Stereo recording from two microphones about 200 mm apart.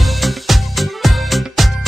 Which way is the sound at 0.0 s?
Centre (ahead or behind).